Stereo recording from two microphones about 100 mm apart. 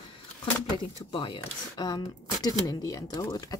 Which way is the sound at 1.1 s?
55° left (ahead or behind).